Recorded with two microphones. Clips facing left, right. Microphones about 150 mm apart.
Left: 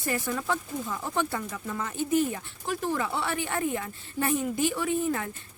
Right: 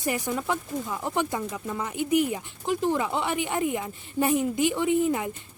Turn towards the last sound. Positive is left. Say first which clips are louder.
# right 4 dB
turn(degrees=-15)  # may be behind; listen again after turning